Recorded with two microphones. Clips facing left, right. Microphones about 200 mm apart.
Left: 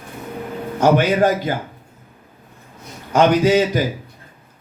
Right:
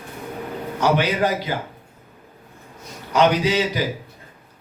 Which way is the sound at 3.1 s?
50° left (ahead or behind).